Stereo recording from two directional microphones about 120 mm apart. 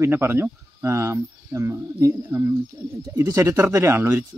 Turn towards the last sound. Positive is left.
turn(degrees=-20)  # may be behind; listen again after turning